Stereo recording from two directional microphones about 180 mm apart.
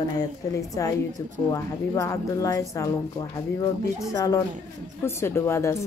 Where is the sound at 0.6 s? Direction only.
20° left (ahead or behind).